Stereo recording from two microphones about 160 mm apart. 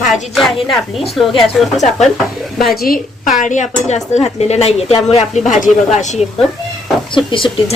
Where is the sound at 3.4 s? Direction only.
50° left (ahead or behind).